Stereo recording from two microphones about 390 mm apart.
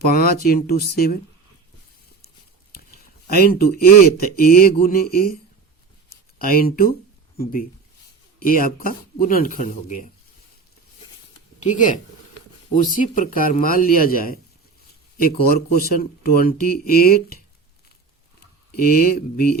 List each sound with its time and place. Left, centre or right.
0.0 s speech: left
3.3 s speech: left
6.1 s a sound: left
7.3 s speech: left
11.6 s speech: centre
15.5 s speech: left
18.8 s speech: left